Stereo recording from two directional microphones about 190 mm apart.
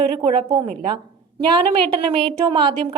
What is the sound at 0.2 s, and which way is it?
Speech, 25° right (ahead or behind).